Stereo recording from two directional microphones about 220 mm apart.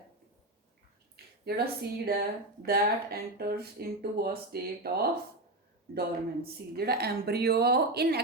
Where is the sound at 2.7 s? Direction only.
45° right (ahead or behind).